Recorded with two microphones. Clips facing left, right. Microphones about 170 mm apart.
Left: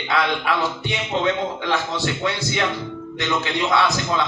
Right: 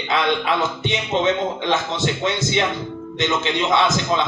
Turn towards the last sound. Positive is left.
turn(degrees=-20)  # may be behind; listen again after turning